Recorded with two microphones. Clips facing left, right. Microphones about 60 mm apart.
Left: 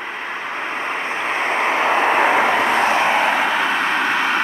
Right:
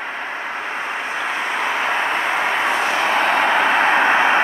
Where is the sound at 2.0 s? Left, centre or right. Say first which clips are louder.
Left 5 dB; left.